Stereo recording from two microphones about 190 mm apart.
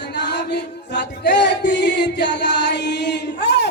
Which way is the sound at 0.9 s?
65° left (ahead or behind).